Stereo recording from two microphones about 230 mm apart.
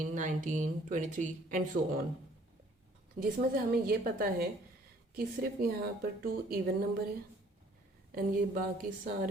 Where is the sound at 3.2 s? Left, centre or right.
Right.